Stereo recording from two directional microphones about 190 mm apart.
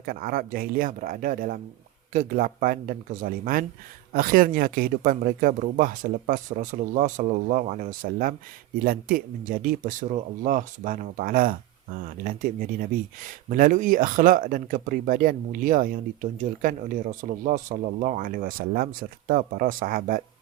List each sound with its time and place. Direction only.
0.0 s speech: 50° right (ahead or behind)